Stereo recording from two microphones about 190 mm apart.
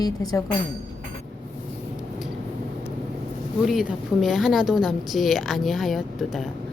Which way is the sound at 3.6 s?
5° right (ahead or behind).